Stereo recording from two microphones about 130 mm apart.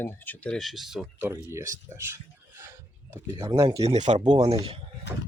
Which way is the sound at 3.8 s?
60° right (ahead or behind).